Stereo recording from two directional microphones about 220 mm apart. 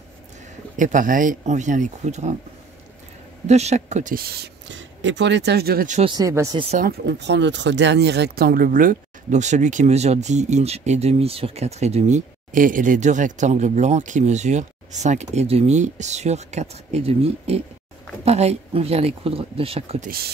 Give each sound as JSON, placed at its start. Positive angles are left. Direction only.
{"t": 0.7, "sound": "speech", "side_deg": -35}
{"t": 3.4, "sound": "speech", "side_deg": -30}
{"t": 6.1, "sound": "speech", "side_deg": -15}
{"t": 6.8, "sound": "speech", "side_deg": -50}